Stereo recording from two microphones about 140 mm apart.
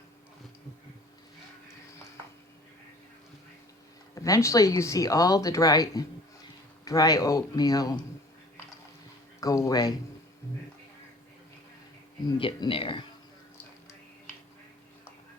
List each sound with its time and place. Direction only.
4.1 s speech: 25° left (ahead or behind)
9.4 s speech: 25° left (ahead or behind)
12.4 s speech: 35° left (ahead or behind)